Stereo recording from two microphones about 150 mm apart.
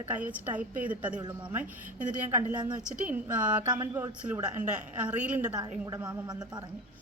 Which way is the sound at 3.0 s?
10° right (ahead or behind).